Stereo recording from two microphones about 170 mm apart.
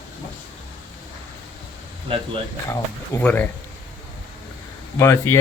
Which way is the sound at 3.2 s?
10° left (ahead or behind).